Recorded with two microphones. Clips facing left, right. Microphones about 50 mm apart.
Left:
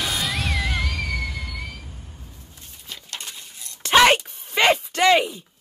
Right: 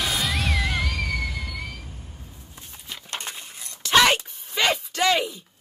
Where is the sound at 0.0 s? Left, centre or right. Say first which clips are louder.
Even; centre.